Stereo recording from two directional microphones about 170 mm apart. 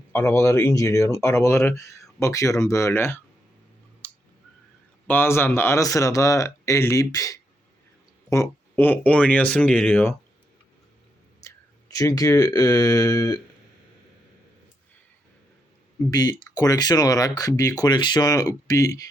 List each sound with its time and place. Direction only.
0.1 s speech: 15° left (ahead or behind)
5.0 s speech: 10° left (ahead or behind)
11.4 s speech: 20° left (ahead or behind)
16.0 s speech: 20° left (ahead or behind)